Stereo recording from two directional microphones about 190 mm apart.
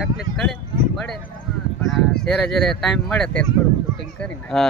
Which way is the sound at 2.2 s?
Centre (ahead or behind).